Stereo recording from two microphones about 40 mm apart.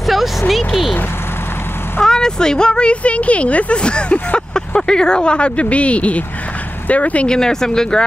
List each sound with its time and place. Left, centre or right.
0.0 s a sound: centre
2.0 s speech: centre; by 7.2 s left
7.2 s speech: centre